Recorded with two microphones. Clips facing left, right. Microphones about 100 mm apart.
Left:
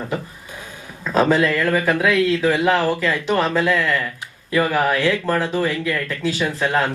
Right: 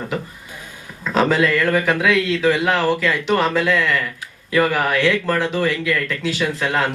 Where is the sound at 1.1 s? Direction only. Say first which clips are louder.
Even; 40° left (ahead or behind).